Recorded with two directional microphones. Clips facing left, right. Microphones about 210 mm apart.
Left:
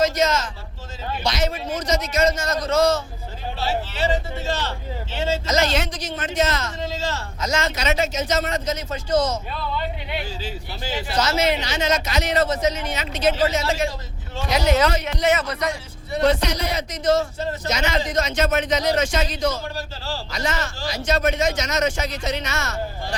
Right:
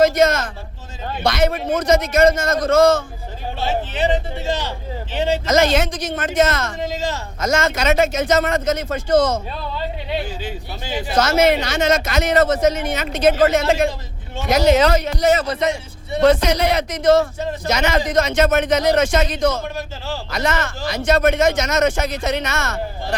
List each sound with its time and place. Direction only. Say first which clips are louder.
0.0 s a sound: right 5 dB; 55° right (ahead or behind)
1.2 s speech: right 6 dB; 55° right (ahead or behind)
3.9 s speech: right 3 dB; 15° right (ahead or behind)
5.5 s speech: right 7 dB; 55° right (ahead or behind)
6.7 s speech: right 3 dB; 15° right (ahead or behind)
7.3 s speech: right 6 dB; 50° right (ahead or behind)
10.2 s speech: right 3 dB; 20° right (ahead or behind)
11.1 s speech: right 6 dB; 50° right (ahead or behind)
14.8 s a man's voice: right 4 dB; 40° right (ahead or behind)
16.2 s speech: right 6 dB; 50° right (ahead or behind)
19.6 s speech: right 3 dB; 20° right (ahead or behind)
20.3 s speech: right 6 dB; 55° right (ahead or behind)